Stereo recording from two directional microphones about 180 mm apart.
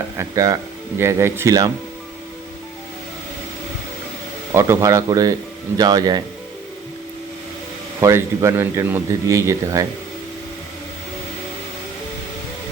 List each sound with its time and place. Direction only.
0.2 s speech: 20° right (ahead or behind)
4.5 s speech: 15° right (ahead or behind)
8.0 s speech: 15° right (ahead or behind)